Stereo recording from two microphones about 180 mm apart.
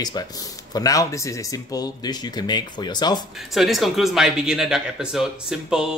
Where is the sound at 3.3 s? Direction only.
Centre (ahead or behind).